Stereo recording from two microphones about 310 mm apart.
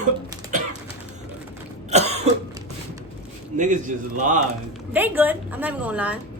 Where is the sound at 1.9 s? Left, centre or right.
Right.